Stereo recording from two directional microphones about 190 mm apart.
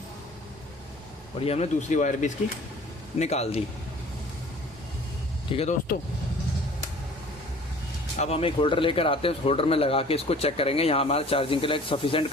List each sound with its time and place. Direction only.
1.5 s a man's voice: 35° left (ahead or behind)
5.5 s speech: 30° left (ahead or behind)
8.2 s a man's voice: 30° left (ahead or behind)